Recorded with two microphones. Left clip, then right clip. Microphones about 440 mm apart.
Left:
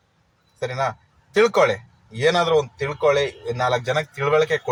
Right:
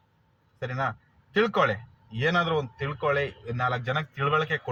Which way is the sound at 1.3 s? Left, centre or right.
Right.